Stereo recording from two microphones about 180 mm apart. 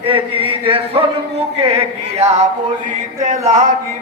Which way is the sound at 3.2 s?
45° right (ahead or behind).